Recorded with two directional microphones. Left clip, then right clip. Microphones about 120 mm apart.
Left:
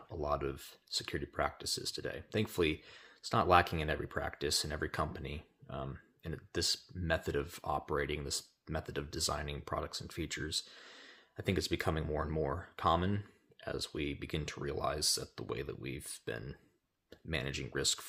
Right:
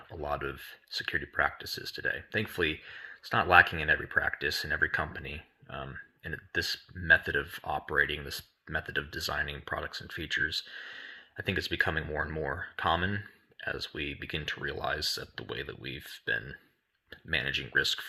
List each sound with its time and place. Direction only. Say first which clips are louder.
0.1 s speech: right 2 dB; 45° left (ahead or behind)